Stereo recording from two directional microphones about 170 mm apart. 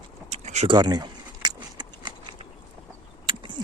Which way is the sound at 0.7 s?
25° right (ahead or behind).